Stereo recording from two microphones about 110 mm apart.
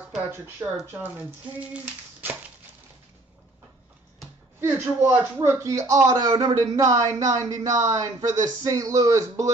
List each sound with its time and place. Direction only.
0.6 s speech: 25° right (ahead or behind)
0.9 s speech: 15° right (ahead or behind)
4.6 s a man's voice: 25° right (ahead or behind)